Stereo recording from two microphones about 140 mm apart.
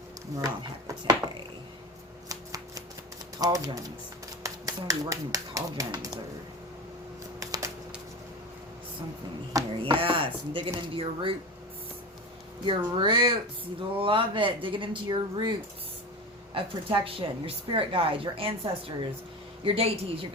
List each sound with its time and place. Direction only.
0.3 s speech: 25° right (ahead or behind)
2.3 s shuffling cards: 25° right (ahead or behind)
3.4 s speech: 25° right (ahead or behind)
7.3 s a sound: 25° right (ahead or behind)
9.8 s a woman's voice: 40° right (ahead or behind)
12.6 s a woman's voice: 35° right (ahead or behind)
16.6 s a woman's voice: 40° right (ahead or behind)